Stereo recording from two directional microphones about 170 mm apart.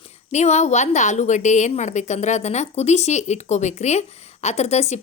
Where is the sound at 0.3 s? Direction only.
40° left (ahead or behind).